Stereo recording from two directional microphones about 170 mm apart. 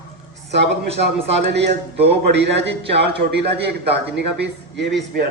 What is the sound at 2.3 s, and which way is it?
A man's voice, 90° right.